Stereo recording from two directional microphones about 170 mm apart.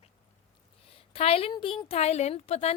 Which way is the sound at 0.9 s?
35° left (ahead or behind).